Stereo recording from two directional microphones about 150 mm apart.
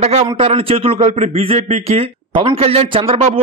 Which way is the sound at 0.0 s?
45° right (ahead or behind).